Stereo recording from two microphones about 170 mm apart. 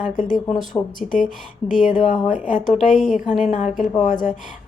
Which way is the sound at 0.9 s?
50° left (ahead or behind).